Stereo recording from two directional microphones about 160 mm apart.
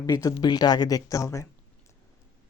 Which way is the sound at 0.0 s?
20° left (ahead or behind).